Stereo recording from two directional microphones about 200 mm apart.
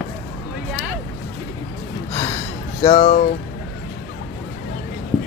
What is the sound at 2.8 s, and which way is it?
Speech, 35° left (ahead or behind).